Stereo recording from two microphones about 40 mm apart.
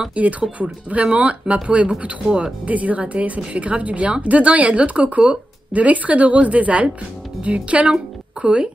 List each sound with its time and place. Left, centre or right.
0.1 s a woman's voice: right
2.6 s a woman's voice: right